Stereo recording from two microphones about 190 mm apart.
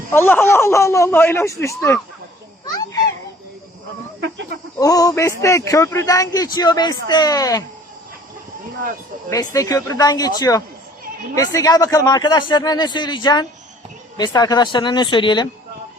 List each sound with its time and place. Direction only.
0.1 s speech: 10° left (ahead or behind)
4.8 s a man's voice: 20° left (ahead or behind)
9.3 s a man's voice: 20° left (ahead or behind)